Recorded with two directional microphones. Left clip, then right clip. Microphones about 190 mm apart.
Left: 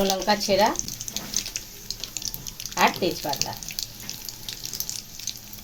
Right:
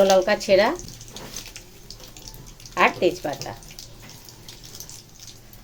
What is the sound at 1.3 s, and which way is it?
Water, centre (ahead or behind).